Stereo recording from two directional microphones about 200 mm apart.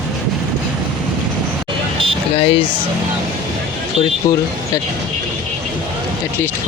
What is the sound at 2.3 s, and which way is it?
Speech, 30° left (ahead or behind).